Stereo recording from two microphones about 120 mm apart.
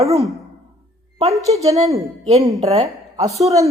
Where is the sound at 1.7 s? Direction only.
30° right (ahead or behind).